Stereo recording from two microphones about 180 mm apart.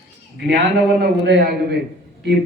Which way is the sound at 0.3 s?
70° right (ahead or behind).